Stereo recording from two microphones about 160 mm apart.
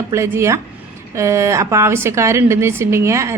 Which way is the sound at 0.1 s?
20° right (ahead or behind).